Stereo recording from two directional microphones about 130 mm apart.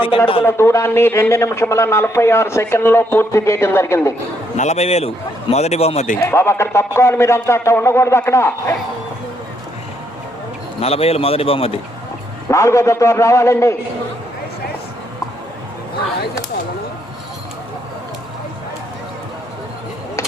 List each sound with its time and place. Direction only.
0.4 s a man's voice: 20° left (ahead or behind)
4.5 s a man's voice: 60° left (ahead or behind)
6.1 s a man's voice: 20° left (ahead or behind)
10.8 s speech: 50° left (ahead or behind)
12.5 s a man's voice: 20° left (ahead or behind)